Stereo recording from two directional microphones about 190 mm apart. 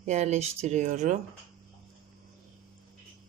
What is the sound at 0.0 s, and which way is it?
Speech, 35° right (ahead or behind).